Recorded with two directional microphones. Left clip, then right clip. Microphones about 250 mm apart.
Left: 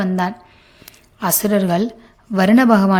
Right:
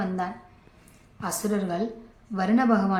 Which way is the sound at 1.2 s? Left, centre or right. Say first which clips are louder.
Left 11 dB; left.